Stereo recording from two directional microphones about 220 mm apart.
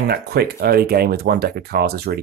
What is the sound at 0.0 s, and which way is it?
Speech, 45° right (ahead or behind).